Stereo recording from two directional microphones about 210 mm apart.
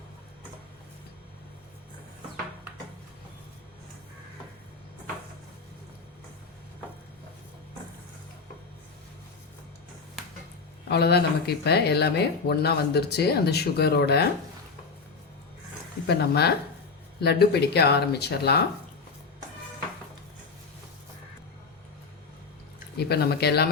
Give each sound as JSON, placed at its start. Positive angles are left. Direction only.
{"t": 10.8, "sound": "speech", "side_deg": 50}
{"t": 16.0, "sound": "speech", "side_deg": 50}
{"t": 23.0, "sound": "speech", "side_deg": 50}